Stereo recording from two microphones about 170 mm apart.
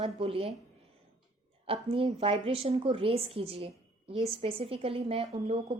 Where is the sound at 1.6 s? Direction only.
35° right (ahead or behind).